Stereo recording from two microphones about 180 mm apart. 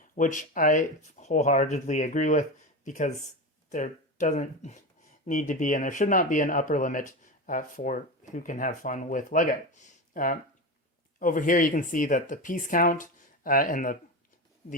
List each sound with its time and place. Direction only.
0.2 s speech: 45° left (ahead or behind)